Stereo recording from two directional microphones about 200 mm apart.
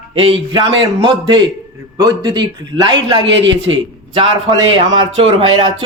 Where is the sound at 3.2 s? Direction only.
65° right (ahead or behind).